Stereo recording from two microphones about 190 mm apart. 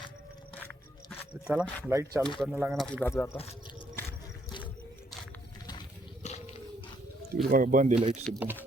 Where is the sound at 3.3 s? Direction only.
30° left (ahead or behind).